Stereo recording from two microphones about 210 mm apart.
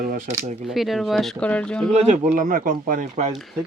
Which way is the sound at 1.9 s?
30° right (ahead or behind).